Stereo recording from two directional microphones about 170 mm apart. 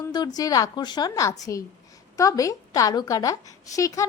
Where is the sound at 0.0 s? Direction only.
25° left (ahead or behind).